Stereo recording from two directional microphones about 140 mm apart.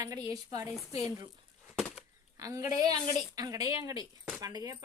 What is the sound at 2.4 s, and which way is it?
Speech, 25° right (ahead or behind).